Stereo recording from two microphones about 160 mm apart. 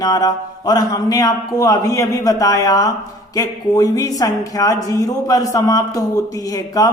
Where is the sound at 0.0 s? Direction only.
20° left (ahead or behind).